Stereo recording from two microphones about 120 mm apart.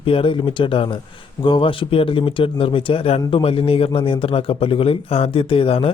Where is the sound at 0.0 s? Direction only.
45° left (ahead or behind).